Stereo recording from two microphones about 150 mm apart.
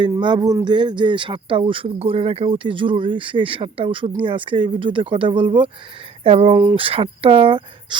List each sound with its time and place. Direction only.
0.0 s speech: 30° right (ahead or behind)